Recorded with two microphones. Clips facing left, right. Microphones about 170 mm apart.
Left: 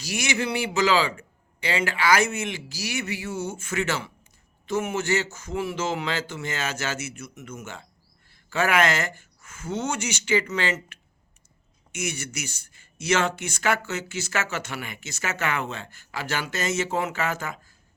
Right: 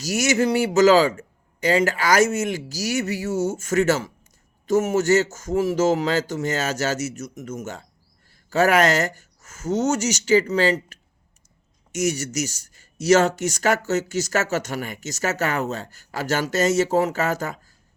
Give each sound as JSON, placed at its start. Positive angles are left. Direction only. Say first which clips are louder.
{"t": 0.0, "sound": "speech", "louder": "right 7 dB", "side_deg": -45}